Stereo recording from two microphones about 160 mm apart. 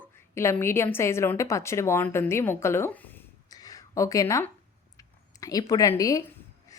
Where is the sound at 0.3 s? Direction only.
15° left (ahead or behind).